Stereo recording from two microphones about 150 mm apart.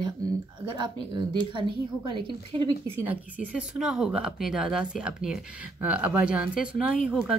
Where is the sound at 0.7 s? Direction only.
30° right (ahead or behind).